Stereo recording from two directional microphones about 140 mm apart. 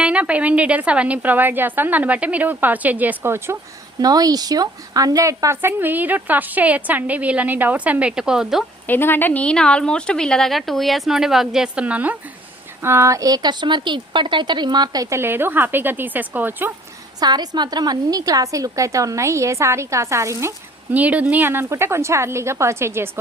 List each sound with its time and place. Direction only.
0.0 s a woman's voice: 10° right (ahead or behind)
8.9 s speech: 15° left (ahead or behind); by 16.7 s 15° right (ahead or behind)
17.2 s speech: 30° right (ahead or behind)
20.9 s a woman's voice: 10° right (ahead or behind)